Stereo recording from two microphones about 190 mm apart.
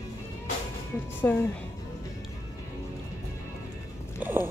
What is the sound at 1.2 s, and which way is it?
Speech, 10° left (ahead or behind).